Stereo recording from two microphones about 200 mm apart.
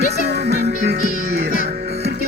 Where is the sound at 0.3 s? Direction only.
55° right (ahead or behind).